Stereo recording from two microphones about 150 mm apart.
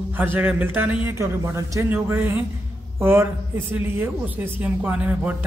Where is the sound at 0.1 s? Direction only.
15° right (ahead or behind).